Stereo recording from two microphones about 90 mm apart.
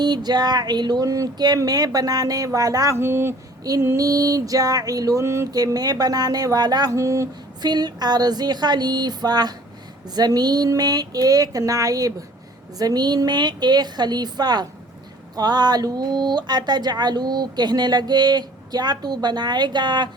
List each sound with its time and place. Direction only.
0.0 s speech: 50° right (ahead or behind)
3.0 s speech: 25° right (ahead or behind)
3.8 s music: 35° right (ahead or behind)
5.5 s speech: 45° right (ahead or behind)
7.6 s speech: 50° right (ahead or behind)